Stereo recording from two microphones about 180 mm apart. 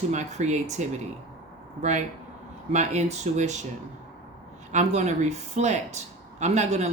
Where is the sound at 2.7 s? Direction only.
40° right (ahead or behind).